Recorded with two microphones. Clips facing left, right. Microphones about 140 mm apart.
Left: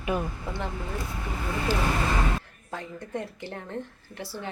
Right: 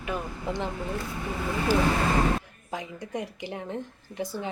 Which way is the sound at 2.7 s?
15° right (ahead or behind).